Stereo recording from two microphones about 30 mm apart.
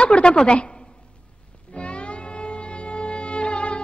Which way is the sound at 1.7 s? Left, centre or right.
Left.